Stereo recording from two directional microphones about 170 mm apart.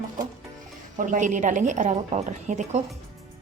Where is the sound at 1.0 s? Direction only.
45° right (ahead or behind).